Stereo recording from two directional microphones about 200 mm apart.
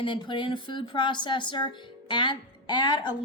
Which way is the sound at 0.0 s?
25° left (ahead or behind).